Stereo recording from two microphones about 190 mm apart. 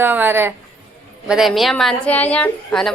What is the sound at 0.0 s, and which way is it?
Speech, 10° right (ahead or behind).